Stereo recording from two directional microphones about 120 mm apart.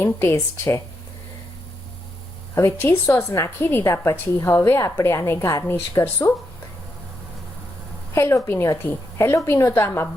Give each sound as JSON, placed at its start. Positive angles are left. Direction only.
{"t": 0.0, "sound": "a woman's voice", "side_deg": 20}
{"t": 2.6, "sound": "a woman's voice", "side_deg": 20}
{"t": 8.1, "sound": "a woman's voice", "side_deg": 20}